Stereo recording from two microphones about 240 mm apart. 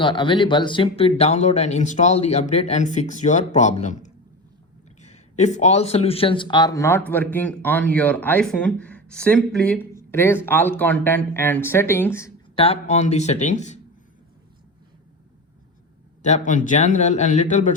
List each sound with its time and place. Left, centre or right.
0.0 s a man's voice: centre
12.5 s speech: left
16.2 s speech: left